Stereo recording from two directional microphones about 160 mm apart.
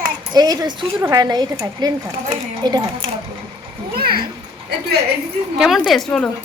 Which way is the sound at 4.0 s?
75° right (ahead or behind).